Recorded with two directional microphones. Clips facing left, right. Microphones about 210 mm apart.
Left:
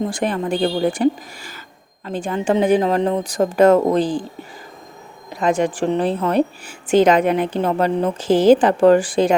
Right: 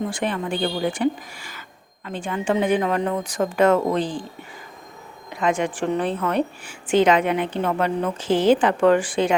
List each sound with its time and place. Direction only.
0.0 s a woman's voice: 40° left (ahead or behind)
5.3 s a woman's voice: 35° left (ahead or behind)